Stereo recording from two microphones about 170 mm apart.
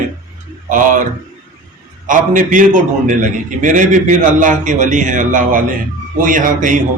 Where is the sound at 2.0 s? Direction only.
50° right (ahead or behind).